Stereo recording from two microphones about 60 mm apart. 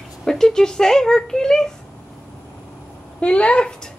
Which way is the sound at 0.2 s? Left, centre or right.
Centre.